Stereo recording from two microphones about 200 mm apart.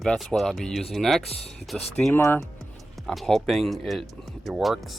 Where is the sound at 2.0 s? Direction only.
10° left (ahead or behind).